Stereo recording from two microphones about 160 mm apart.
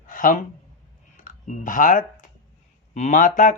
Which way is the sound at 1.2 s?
55° left (ahead or behind).